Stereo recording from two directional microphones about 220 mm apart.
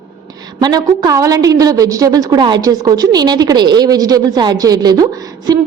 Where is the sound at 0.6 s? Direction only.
20° right (ahead or behind).